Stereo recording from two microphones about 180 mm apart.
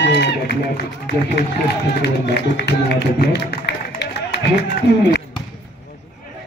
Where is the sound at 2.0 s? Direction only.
65° left (ahead or behind).